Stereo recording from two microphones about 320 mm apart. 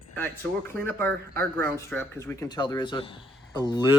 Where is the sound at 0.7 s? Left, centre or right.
Centre.